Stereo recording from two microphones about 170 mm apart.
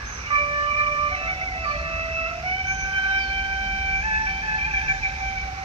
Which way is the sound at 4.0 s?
35° right (ahead or behind).